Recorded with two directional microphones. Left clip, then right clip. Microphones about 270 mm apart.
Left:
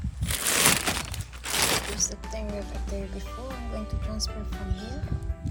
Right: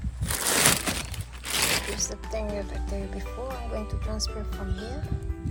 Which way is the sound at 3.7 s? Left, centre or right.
Centre.